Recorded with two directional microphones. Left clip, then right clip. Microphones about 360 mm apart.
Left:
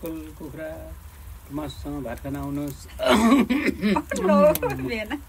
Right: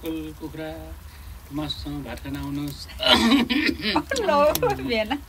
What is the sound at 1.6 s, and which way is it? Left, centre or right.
Snicker, centre.